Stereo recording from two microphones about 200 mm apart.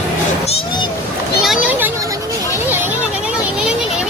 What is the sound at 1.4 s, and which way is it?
Speech, 5° right (ahead or behind).